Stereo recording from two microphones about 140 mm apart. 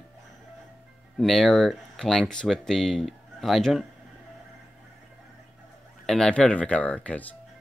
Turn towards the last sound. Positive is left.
turn(degrees=10)  # may be behind; listen again after turning